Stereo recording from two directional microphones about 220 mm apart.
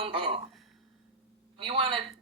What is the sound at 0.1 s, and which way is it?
Speech, 25° right (ahead or behind).